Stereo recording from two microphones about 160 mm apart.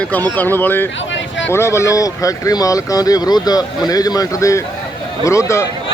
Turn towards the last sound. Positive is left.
turn(degrees=20)  # may be behind; listen again after turning